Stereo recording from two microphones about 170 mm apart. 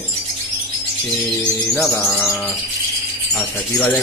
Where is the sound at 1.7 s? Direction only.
5° left (ahead or behind).